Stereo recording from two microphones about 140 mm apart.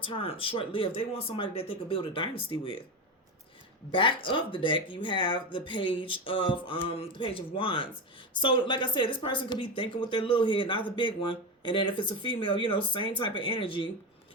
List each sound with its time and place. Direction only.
0.0 s speech: 40° left (ahead or behind)
3.9 s speech: 35° left (ahead or behind)